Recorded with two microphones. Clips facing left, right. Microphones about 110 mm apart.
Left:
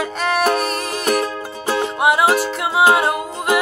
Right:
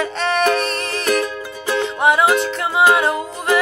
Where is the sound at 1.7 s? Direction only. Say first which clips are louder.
Right 1 dB; 15° left (ahead or behind).